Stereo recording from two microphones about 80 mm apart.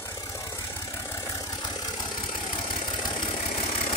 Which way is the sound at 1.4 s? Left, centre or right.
Left.